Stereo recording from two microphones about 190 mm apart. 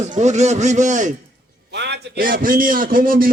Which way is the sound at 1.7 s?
65° right (ahead or behind).